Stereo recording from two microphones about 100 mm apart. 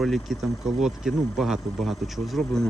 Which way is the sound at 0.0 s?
Centre (ahead or behind).